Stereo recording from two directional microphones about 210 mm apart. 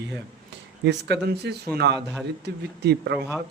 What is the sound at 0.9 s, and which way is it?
Speech, 55° right (ahead or behind).